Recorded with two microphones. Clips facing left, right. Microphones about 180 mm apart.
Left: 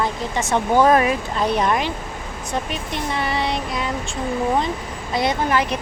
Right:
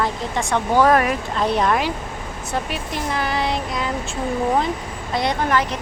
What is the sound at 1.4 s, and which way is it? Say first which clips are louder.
Speech: right 1 dB; centre (ahead or behind).